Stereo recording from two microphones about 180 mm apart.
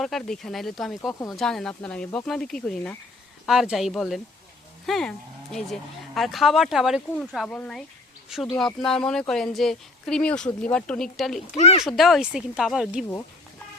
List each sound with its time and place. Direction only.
0.0 s speech: centre (ahead or behind)
11.5 s speech: 35° left (ahead or behind)
11.9 s speech: centre (ahead or behind)